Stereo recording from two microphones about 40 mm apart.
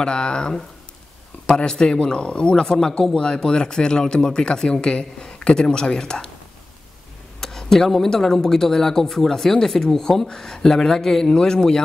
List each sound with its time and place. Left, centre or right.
0.0 s speech: left
7.3 s speech: centre